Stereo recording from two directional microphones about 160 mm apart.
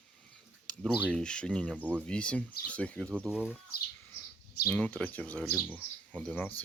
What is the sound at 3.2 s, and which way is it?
Speech, 5° right (ahead or behind).